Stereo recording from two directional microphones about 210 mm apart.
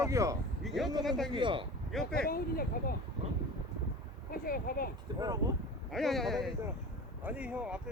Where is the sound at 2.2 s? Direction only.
45° left (ahead or behind).